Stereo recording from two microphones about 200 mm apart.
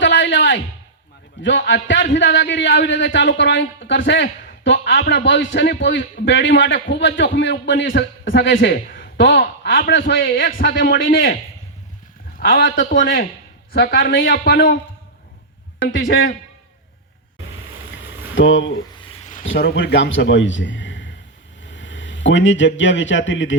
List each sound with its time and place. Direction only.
0.0 s a sound: 65° left (ahead or behind)
1.4 s a man's voice: 65° left (ahead or behind)
8.5 s speech: 45° left (ahead or behind)
9.2 s a man's voice: 60° left (ahead or behind)
12.4 s a man's voice: 50° left (ahead or behind)
15.8 s a man's voice: 65° left (ahead or behind)
18.3 s a man's voice: 70° left (ahead or behind)